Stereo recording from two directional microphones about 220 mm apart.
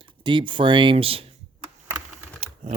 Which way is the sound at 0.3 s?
20° right (ahead or behind).